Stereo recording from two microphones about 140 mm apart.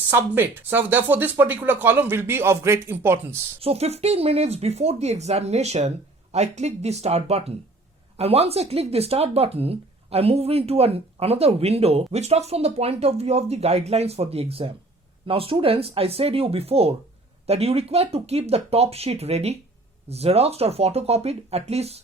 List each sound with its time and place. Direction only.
0.1 s speech: 15° right (ahead or behind)
3.6 s speech: 45° right (ahead or behind)